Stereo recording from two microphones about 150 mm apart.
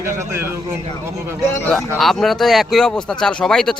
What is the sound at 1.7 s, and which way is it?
Speech, centre (ahead or behind).